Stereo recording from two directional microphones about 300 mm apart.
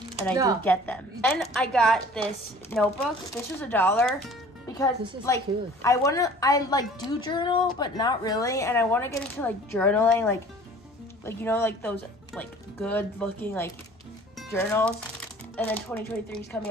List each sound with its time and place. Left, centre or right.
0.1 s speech: centre
0.7 s a woman's voice: centre